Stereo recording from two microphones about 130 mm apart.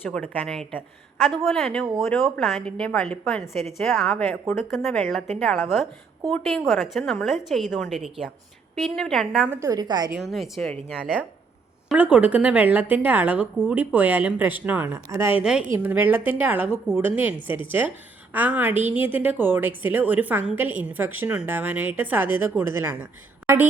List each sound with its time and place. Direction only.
0.0 s a woman's voice: 10° left (ahead or behind)
4.1 s speech: 15° left (ahead or behind)
4.5 s a woman's voice: 5° left (ahead or behind)
9.5 s a woman's voice: 25° right (ahead or behind)
10.2 s a woman's voice: centre (ahead or behind)
11.9 s a woman's voice: 10° right (ahead or behind)